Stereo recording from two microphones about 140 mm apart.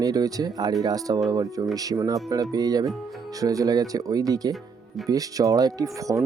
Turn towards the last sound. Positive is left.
turn(degrees=-25)  # may be behind; listen again after turning